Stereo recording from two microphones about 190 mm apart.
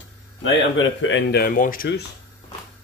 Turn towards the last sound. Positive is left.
turn(degrees=55)  # may be behind; listen again after turning